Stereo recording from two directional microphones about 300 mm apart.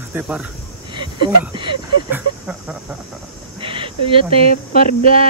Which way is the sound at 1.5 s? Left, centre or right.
Centre.